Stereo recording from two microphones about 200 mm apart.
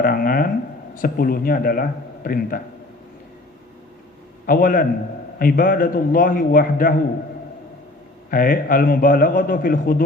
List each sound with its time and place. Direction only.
0.0 s a man's voice: 45° left (ahead or behind)
4.4 s a man's voice: 45° left (ahead or behind)
8.3 s a man's voice: 45° left (ahead or behind)